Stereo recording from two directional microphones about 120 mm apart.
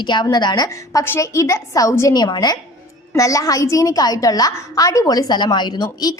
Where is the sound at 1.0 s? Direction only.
25° left (ahead or behind).